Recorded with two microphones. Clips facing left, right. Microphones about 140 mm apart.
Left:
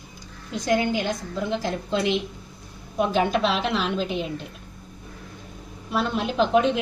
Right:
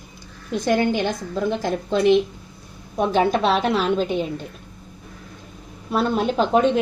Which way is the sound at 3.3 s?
45° right (ahead or behind).